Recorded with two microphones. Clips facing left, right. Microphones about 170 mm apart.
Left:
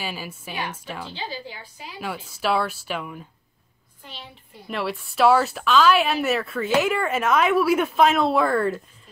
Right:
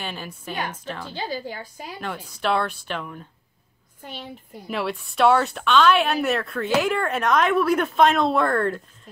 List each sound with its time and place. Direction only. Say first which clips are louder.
0.0 s speech: left 1 dB; 5° left (ahead or behind)
1.1 s a woman's voice: right 4 dB; 45° right (ahead or behind)
2.0 s speech: left 2 dB; 5° left (ahead or behind)
4.0 s a woman's voice: right 6 dB; 45° right (ahead or behind)
4.6 s speech: right 1 dB; centre (ahead or behind)